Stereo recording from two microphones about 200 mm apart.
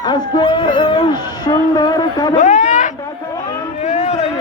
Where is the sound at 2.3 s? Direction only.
40° left (ahead or behind).